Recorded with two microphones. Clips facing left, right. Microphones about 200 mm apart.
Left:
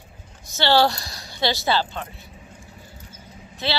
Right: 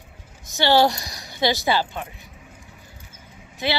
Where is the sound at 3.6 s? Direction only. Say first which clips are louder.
Right 2 dB; 15° right (ahead or behind).